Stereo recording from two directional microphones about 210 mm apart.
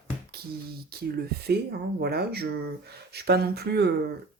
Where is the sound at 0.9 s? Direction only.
45° right (ahead or behind).